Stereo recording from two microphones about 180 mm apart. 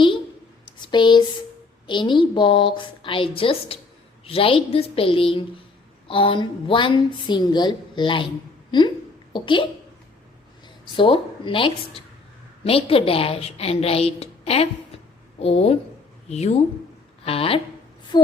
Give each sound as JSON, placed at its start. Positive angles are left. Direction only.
{"t": 0.8, "sound": "a woman's voice", "side_deg": 25}
{"t": 10.9, "sound": "a woman's voice", "side_deg": 30}